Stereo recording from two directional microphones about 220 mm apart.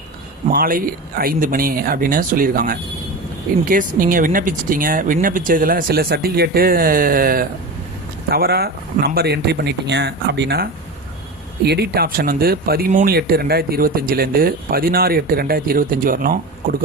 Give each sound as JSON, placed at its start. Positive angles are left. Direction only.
{"t": 0.4, "sound": "speech", "side_deg": -40}